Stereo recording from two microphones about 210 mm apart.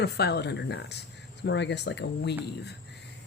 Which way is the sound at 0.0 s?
50° left (ahead or behind).